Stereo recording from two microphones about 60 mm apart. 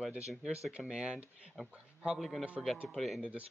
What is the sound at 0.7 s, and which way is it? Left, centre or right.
Speech, centre.